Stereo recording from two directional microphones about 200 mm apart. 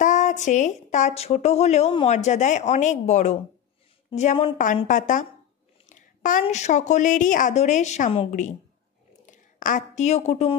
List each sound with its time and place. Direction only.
0.0 s a woman's voice: 40° left (ahead or behind)
5.9 s a sound: 40° left (ahead or behind)
6.4 s a woman's voice: 35° left (ahead or behind)